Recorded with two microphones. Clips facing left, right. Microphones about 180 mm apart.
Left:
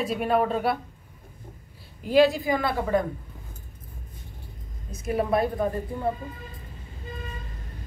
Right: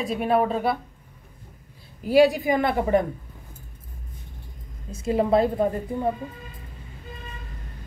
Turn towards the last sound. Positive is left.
turn(degrees=-20)  # may be behind; listen again after turning